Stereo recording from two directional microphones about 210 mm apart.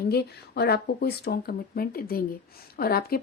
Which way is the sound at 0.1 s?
50° left (ahead or behind).